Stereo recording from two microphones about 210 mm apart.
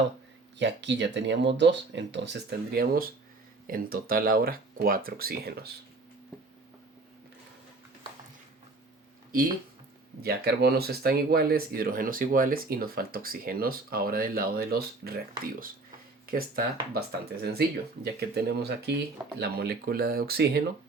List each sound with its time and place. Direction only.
0.6 s speech: 60° right (ahead or behind)
10.2 s speech: 45° right (ahead or behind)
16.2 s speech: 45° right (ahead or behind)